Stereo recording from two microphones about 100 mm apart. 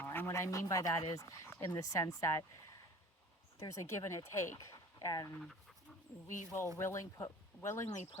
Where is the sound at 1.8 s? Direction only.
35° left (ahead or behind).